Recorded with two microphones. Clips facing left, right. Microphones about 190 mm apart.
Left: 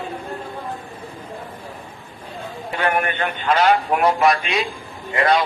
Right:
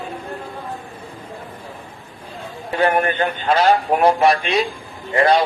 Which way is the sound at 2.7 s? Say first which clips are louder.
Right 4 dB; 35° right (ahead or behind).